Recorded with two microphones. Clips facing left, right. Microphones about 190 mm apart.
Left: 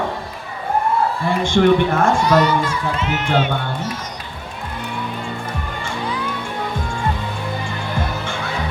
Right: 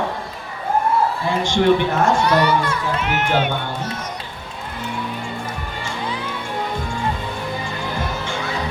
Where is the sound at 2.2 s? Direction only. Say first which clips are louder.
Left 1 dB; 60° right (ahead or behind).